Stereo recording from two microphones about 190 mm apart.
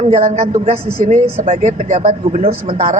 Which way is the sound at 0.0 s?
35° right (ahead or behind).